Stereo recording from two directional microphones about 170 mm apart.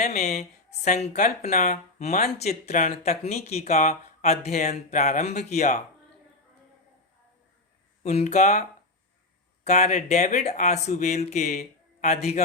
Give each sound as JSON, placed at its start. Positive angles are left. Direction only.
{"t": 0.0, "sound": "a woman's voice", "side_deg": 45}
{"t": 8.0, "sound": "speech", "side_deg": 40}
{"t": 9.6, "sound": "speech", "side_deg": 40}